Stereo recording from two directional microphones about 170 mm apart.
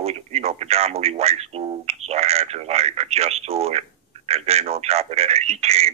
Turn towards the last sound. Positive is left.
turn(degrees=-40)  # may be behind; listen again after turning